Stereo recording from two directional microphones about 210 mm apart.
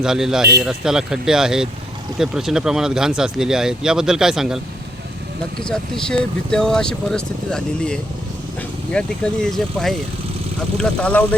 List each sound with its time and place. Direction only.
0.0 s speech: centre (ahead or behind)